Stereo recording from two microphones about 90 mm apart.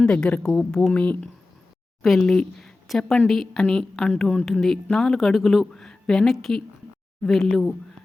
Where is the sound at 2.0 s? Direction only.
Centre (ahead or behind).